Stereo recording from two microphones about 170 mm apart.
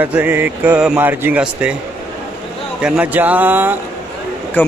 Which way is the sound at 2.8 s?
10° right (ahead or behind).